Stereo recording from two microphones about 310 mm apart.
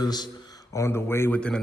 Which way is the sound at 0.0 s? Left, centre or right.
Centre.